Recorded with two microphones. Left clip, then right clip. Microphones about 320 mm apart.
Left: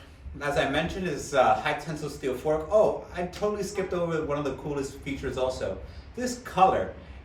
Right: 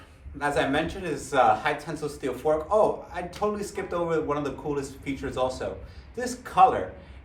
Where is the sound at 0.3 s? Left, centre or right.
Centre.